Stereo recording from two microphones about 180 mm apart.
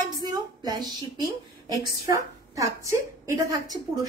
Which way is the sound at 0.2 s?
25° right (ahead or behind).